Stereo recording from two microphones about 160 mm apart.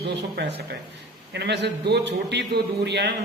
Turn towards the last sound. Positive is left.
turn(degrees=-90)